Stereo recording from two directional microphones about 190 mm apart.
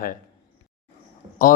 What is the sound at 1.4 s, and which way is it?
Speech, 45° left (ahead or behind).